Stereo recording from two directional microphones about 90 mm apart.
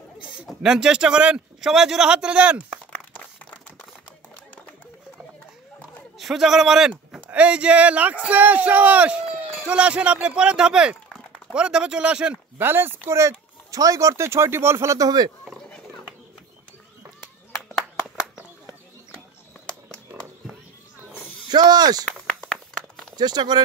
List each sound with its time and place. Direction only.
0.5 s speech: 10° right (ahead or behind)
2.9 s crumpling: 15° left (ahead or behind)
6.1 s speech: 5° right (ahead or behind)
12.5 s speech: 25° right (ahead or behind); by 15.3 s 45° right (ahead or behind)
17.7 s a sound: 5° right (ahead or behind)
21.5 s speech: 50° right (ahead or behind)
22.0 s a sound: 10° left (ahead or behind)
23.1 s speech: 50° right (ahead or behind)